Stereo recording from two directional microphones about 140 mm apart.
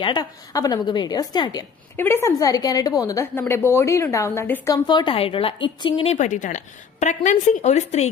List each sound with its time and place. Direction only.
0.0 s a woman's voice: 30° left (ahead or behind)
2.0 s a woman's voice: 15° left (ahead or behind)
4.7 s a woman's voice: 30° left (ahead or behind)
6.1 s speech: 65° left (ahead or behind)